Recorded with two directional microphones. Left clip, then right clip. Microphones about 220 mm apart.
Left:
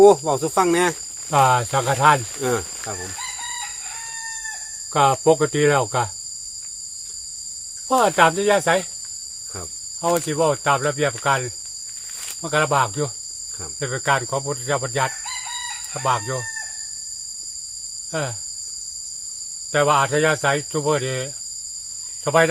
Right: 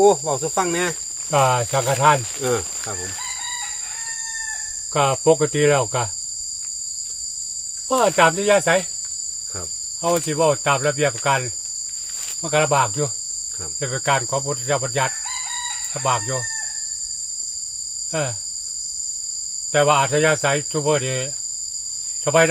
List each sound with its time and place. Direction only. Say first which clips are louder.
0.0 s speech: left 3 dB; 50° left (ahead or behind)
1.3 s speech: left 1 dB; 15° left (ahead or behind)
4.9 s speech: left 1 dB; 15° left (ahead or behind)
7.9 s speech: even; 15° left (ahead or behind)
10.0 s speech: right 1 dB; 10° left (ahead or behind)
18.1 s speech: right 1 dB; 15° left (ahead or behind)
19.7 s speech: right 1 dB; 15° left (ahead or behind)